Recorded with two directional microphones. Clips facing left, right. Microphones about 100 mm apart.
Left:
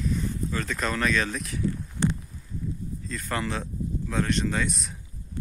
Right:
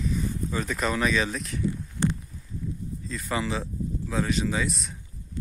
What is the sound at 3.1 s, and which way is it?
Speech, centre (ahead or behind).